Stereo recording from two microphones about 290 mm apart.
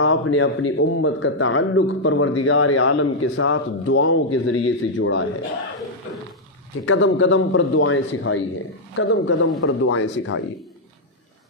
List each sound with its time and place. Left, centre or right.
0.0 s a man's voice: left
6.9 s a man's voice: left